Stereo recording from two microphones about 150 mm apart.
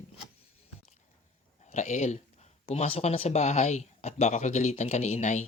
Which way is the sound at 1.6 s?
50° left (ahead or behind).